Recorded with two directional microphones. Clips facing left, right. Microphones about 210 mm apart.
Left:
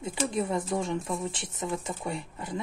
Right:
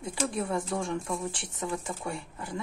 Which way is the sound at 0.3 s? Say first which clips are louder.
Left 4 dB; 20° left (ahead or behind).